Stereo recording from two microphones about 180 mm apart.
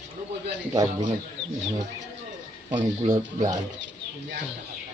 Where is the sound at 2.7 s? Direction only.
25° right (ahead or behind).